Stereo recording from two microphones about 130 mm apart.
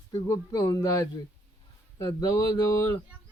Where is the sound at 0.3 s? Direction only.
25° left (ahead or behind).